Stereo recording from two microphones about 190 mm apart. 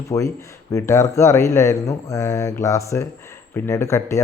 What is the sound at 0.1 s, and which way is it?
Speech, 15° left (ahead or behind).